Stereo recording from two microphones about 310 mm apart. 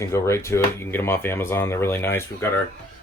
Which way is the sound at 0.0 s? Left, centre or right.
Centre.